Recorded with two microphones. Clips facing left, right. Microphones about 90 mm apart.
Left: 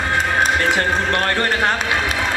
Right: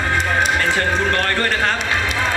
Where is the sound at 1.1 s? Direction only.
20° left (ahead or behind).